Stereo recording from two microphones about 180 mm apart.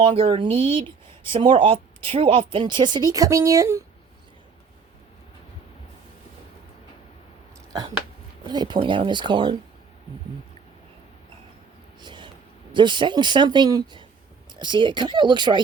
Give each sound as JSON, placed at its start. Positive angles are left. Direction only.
{"t": 0.0, "sound": "speech", "side_deg": -30}
{"t": 8.4, "sound": "speech", "side_deg": -25}
{"t": 11.9, "sound": "a sound", "side_deg": -25}
{"t": 12.7, "sound": "speech", "side_deg": -25}